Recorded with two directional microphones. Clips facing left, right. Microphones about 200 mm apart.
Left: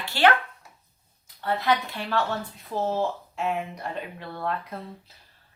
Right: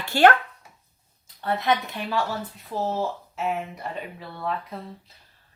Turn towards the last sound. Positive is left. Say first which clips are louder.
# even
turn(degrees=0)  # may be behind; listen again after turning